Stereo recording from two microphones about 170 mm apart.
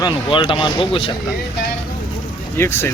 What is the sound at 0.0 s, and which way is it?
Speech, 30° left (ahead or behind).